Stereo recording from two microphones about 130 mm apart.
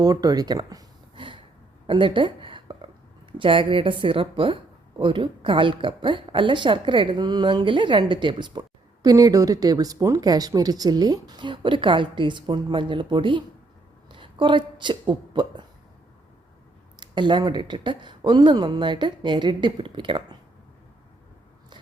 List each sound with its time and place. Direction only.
0.0 s a woman's voice: 30° right (ahead or behind)
17.0 s a woman's voice: 35° right (ahead or behind)